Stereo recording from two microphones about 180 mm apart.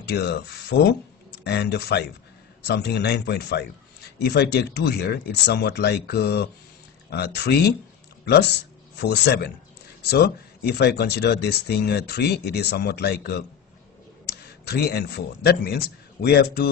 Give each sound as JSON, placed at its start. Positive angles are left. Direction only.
{"t": 0.0, "sound": "a man's voice", "side_deg": 70}
{"t": 8.9, "sound": "a man's voice", "side_deg": 70}